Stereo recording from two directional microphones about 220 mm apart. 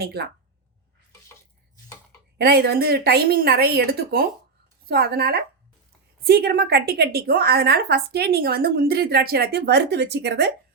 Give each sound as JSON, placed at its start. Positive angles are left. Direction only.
{"t": 0.0, "sound": "a woman's voice", "side_deg": -45}
{"t": 2.4, "sound": "a woman's voice", "side_deg": -45}